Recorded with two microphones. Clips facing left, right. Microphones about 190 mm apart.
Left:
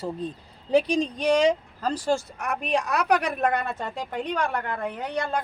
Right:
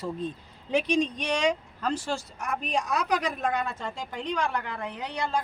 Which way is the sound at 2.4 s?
65° left (ahead or behind).